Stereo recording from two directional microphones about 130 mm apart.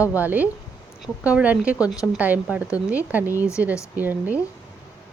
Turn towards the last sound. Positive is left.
turn(degrees=-15)  # may be behind; listen again after turning